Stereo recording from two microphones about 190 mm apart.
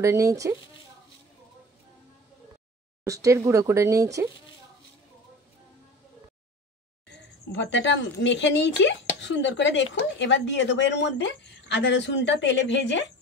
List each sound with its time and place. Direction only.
0.0 s speech: 15° right (ahead or behind)
3.0 s speech: 15° right (ahead or behind)
7.1 s a woman's voice: 70° left (ahead or behind)